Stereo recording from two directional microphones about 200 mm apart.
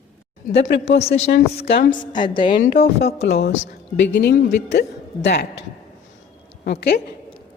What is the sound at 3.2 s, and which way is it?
A woman's voice, 55° left (ahead or behind).